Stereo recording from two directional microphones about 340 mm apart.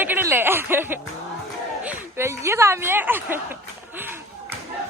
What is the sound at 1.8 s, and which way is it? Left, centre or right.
Speech, centre.